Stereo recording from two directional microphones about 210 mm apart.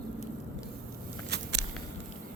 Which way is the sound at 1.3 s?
50° right (ahead or behind).